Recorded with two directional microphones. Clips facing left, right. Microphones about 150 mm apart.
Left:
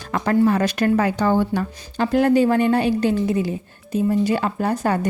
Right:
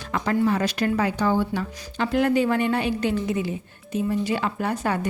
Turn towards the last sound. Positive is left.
turn(degrees=40)  # may be behind; listen again after turning